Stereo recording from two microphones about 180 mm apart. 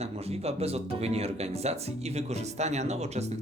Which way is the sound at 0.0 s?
35° right (ahead or behind).